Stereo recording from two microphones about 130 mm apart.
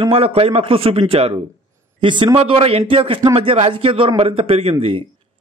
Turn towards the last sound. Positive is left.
turn(degrees=-45)  # may be behind; listen again after turning